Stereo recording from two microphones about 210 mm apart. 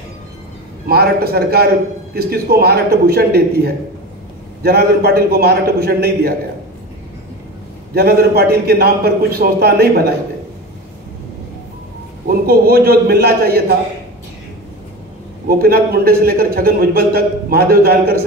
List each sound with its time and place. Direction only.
0.8 s a man's voice: 50° right (ahead or behind)
7.9 s a man's voice: 50° right (ahead or behind)
12.3 s a man's voice: 45° right (ahead or behind)
15.4 s a man's voice: 45° right (ahead or behind)